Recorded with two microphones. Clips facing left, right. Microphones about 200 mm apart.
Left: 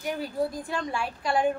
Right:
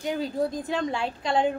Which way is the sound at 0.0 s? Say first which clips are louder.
Right 2 dB; 20° right (ahead or behind).